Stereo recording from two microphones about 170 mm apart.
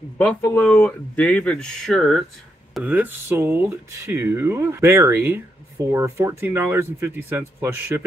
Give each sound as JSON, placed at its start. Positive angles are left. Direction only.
{"t": 0.2, "sound": "speech", "side_deg": 10}
{"t": 2.7, "sound": "speech", "side_deg": -10}